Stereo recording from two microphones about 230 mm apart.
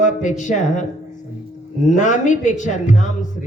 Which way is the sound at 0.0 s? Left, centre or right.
Left.